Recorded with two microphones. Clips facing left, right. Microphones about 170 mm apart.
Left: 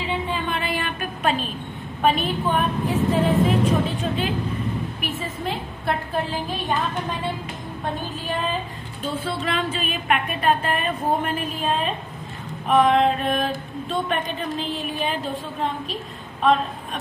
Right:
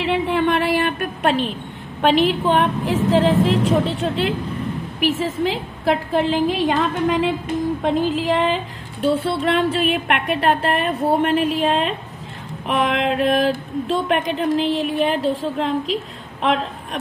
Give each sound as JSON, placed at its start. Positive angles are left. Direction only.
{"t": 0.0, "sound": "a sound", "side_deg": -80}
{"t": 2.0, "sound": "speech", "side_deg": -80}
{"t": 5.0, "sound": "a woman's voice", "side_deg": -90}
{"t": 12.6, "sound": "music", "side_deg": -80}
{"t": 16.3, "sound": "a man's voice", "side_deg": -90}